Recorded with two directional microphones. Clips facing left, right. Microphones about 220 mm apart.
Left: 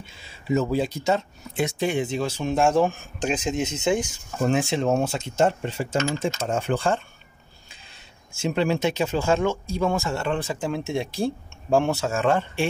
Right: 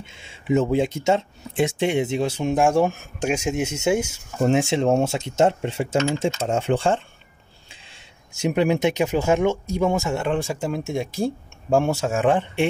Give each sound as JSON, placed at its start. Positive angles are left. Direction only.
{"t": 0.0, "sound": "speech", "side_deg": -20}
{"t": 4.4, "sound": "speech", "side_deg": -25}
{"t": 7.7, "sound": "a sound", "side_deg": -25}
{"t": 8.5, "sound": "speech", "side_deg": -15}